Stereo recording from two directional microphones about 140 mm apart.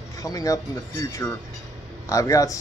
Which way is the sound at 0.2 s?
25° left (ahead or behind).